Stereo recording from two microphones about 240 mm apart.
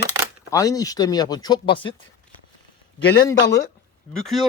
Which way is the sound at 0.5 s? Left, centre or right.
Centre.